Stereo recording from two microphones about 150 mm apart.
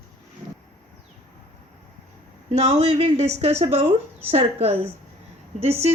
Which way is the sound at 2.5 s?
45° right (ahead or behind).